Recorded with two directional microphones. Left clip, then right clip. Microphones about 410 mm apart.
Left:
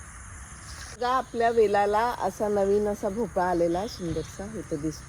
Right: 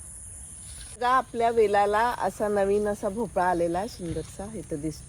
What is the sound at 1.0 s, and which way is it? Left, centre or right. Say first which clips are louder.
Speech: right 2 dB; right.